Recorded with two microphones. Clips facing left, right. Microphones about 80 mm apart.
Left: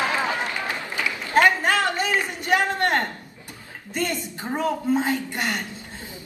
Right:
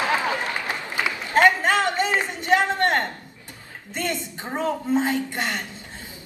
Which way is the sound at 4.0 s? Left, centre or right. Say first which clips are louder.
Left 1 dB; right.